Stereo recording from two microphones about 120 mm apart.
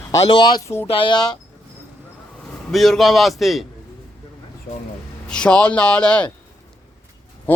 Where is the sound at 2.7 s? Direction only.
Centre (ahead or behind).